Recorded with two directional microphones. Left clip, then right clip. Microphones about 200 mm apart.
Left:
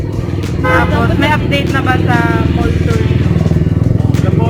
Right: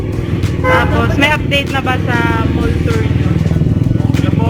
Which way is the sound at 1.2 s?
55° right (ahead or behind).